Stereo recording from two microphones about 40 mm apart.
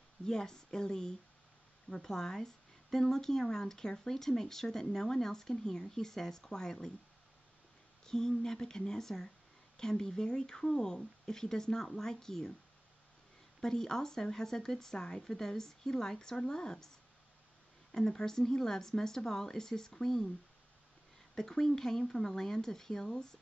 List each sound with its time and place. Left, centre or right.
0.2 s speech: centre
8.0 s speech: centre
13.6 s speech: centre
17.9 s speech: centre
21.4 s speech: centre